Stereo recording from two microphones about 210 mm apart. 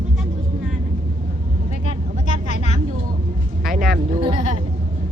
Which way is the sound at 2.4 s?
35° left (ahead or behind).